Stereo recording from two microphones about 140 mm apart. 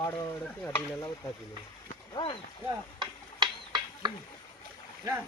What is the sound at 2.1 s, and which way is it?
Speech, 40° left (ahead or behind).